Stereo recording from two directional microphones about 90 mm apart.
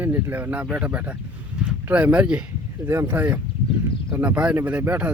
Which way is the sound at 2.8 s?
25° right (ahead or behind).